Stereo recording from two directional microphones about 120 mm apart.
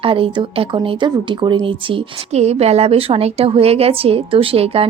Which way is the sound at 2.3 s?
60° right (ahead or behind).